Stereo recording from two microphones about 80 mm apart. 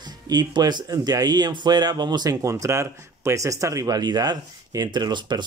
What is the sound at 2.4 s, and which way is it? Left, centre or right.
Speech, right.